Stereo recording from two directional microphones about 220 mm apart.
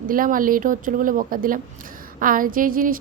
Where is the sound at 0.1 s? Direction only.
40° right (ahead or behind).